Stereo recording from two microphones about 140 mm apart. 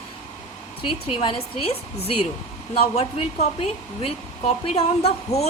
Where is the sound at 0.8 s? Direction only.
40° left (ahead or behind).